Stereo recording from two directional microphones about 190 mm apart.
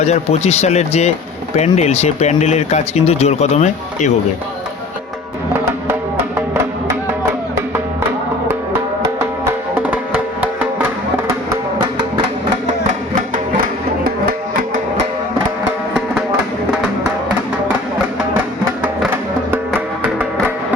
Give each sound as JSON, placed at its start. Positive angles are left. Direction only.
{"t": 0.0, "sound": "speech", "side_deg": 35}
{"t": 9.4, "sound": "music", "side_deg": -10}
{"t": 18.8, "sound": "music", "side_deg": -10}